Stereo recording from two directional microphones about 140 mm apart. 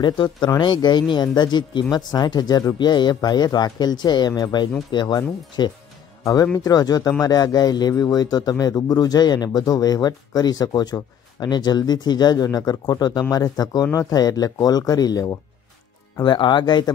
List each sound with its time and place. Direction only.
0.0 s speech: 35° left (ahead or behind)